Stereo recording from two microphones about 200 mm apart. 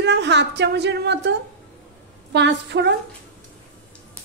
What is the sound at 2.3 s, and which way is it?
Speech, 60° right (ahead or behind).